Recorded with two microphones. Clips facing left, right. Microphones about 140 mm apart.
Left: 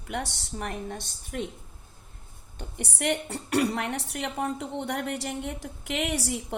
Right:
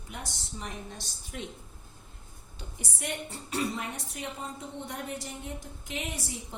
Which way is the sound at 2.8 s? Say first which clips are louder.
Left 8 dB; 70° left (ahead or behind).